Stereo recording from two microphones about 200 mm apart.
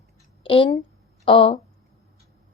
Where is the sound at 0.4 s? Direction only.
25° left (ahead or behind).